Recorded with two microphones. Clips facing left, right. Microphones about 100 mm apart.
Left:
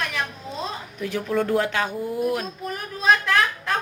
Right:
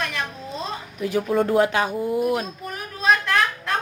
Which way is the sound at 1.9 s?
10° right (ahead or behind).